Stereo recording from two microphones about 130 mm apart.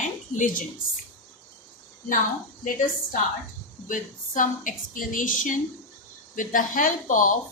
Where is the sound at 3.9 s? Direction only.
90° left.